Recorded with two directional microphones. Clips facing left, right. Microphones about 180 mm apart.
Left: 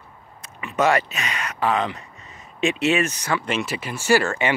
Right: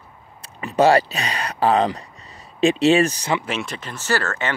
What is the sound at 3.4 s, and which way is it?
Speech, 5° left (ahead or behind).